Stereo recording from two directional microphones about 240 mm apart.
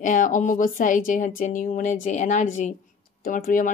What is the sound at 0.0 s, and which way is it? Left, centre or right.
Speech, left.